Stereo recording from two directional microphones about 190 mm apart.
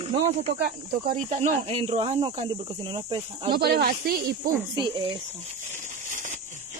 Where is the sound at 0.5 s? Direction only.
50° right (ahead or behind).